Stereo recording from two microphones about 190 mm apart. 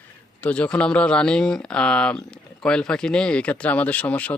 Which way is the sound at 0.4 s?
5° left (ahead or behind).